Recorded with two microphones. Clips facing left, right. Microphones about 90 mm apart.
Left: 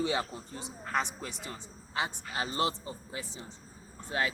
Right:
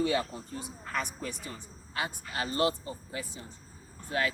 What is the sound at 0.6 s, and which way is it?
Speech, 25° left (ahead or behind).